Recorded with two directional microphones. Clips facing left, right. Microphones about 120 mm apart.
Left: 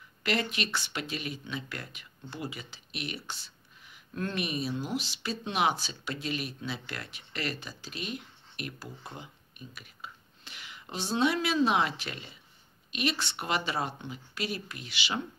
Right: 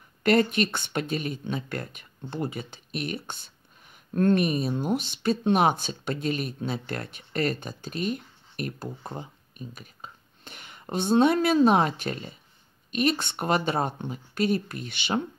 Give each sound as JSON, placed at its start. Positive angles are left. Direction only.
{"t": 0.2, "sound": "speech", "side_deg": -50}